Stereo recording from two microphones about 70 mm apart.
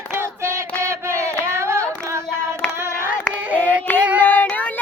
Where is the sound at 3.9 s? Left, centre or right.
Left.